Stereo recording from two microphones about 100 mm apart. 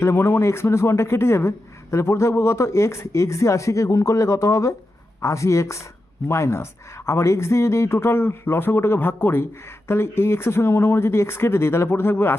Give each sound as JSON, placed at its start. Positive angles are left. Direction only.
{"t": 0.0, "sound": "speech", "side_deg": 25}